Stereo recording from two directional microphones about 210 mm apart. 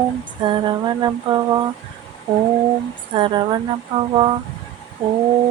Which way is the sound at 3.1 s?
25° right (ahead or behind).